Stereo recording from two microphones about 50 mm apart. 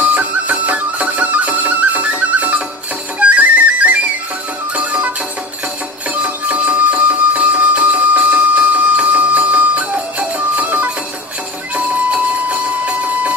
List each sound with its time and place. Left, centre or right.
0.0 s music: right
6.2 s music: right